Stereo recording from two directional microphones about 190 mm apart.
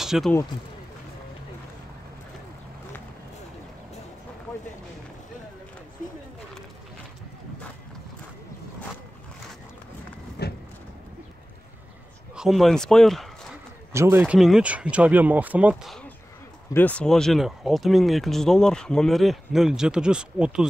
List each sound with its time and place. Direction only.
0.0 s speech: centre (ahead or behind)
10.4 s a sound: 55° left (ahead or behind)
12.4 s speech: centre (ahead or behind)
13.9 s speech: 10° right (ahead or behind)